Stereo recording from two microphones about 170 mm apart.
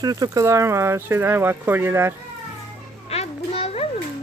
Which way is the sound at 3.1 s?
35° left (ahead or behind).